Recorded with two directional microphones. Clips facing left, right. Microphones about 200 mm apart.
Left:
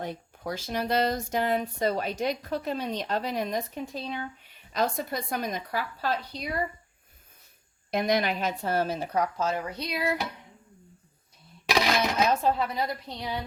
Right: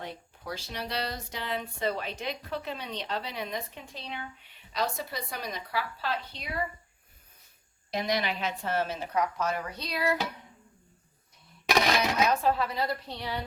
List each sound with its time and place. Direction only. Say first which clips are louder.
0.0 s speech: left 6 dB; 45° left (ahead or behind)
7.9 s a woman's voice: left 4 dB; 50° left (ahead or behind); by 10.2 s 15° left (ahead or behind)
12.4 s a woman's voice: left 1 dB; 20° left (ahead or behind)